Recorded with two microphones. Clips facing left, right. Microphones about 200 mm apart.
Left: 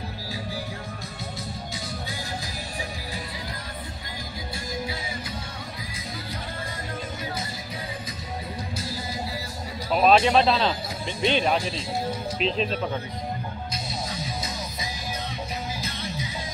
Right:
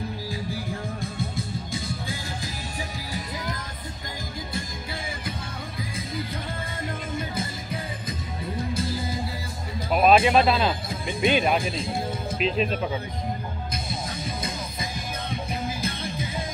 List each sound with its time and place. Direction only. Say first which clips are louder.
1.3 s music: right 3 dB; 50° right (ahead or behind)
9.9 s speech: right 1 dB; 5° right (ahead or behind)
11.5 s speech: right 1 dB; 50° right (ahead or behind)
12.4 s speech: right 2 dB; 5° right (ahead or behind)
14.1 s music: right 1 dB; 55° right (ahead or behind)